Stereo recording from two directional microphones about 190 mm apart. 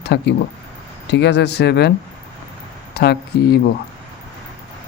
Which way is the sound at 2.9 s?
55° left (ahead or behind).